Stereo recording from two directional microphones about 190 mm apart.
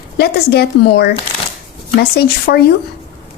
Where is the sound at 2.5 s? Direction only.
55° left (ahead or behind).